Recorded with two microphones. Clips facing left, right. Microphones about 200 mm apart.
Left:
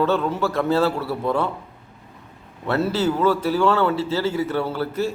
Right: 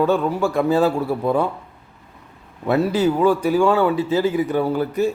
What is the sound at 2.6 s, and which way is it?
A man's voice, 15° right (ahead or behind).